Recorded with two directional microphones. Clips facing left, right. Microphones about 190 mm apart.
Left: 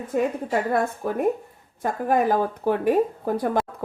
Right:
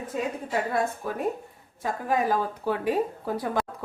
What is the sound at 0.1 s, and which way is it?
Speech, 55° left (ahead or behind).